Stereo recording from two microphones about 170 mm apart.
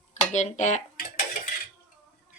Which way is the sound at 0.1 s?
45° left (ahead or behind).